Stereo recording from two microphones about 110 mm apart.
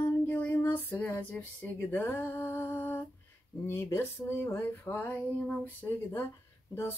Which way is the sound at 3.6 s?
20° left (ahead or behind).